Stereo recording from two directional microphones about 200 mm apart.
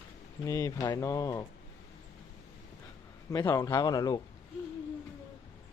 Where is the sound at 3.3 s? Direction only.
15° left (ahead or behind).